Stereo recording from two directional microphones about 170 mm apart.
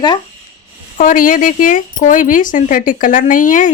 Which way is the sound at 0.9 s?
50° left (ahead or behind).